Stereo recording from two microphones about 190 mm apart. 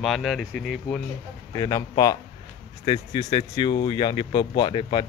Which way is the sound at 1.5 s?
20° left (ahead or behind).